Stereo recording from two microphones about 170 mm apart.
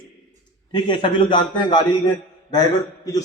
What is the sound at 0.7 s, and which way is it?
A man's voice, 30° left (ahead or behind).